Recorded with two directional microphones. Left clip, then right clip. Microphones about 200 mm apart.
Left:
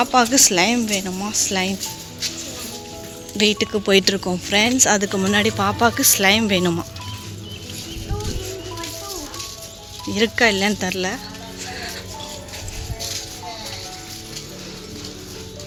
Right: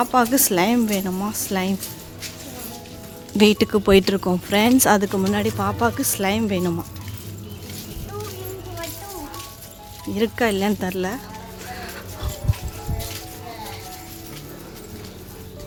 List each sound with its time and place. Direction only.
0.0 s a woman's voice: 10° right (ahead or behind)
3.3 s speech: 25° right (ahead or behind)
5.3 s speech: centre (ahead or behind)
10.1 s a woman's voice: 5° right (ahead or behind)